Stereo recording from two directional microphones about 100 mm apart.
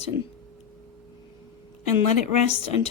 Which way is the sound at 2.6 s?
90° left.